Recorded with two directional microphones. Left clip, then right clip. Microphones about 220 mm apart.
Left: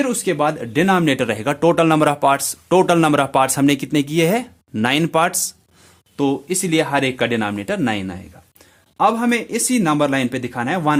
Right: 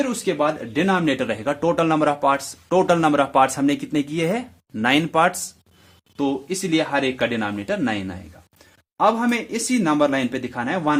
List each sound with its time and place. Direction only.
0.0 s speech: 40° left (ahead or behind)